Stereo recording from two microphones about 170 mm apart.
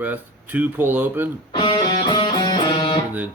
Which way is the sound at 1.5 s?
25° left (ahead or behind).